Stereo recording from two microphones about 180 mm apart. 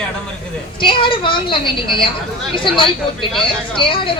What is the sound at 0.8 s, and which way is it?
Speech, 30° left (ahead or behind).